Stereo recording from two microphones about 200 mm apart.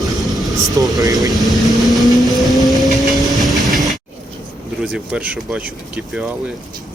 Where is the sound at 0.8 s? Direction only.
15° right (ahead or behind).